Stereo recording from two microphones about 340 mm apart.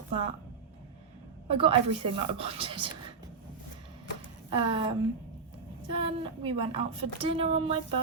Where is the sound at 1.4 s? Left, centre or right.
Centre.